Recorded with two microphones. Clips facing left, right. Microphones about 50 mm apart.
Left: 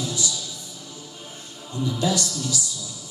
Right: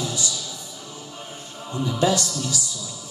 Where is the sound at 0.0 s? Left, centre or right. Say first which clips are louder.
Right 1 dB; right.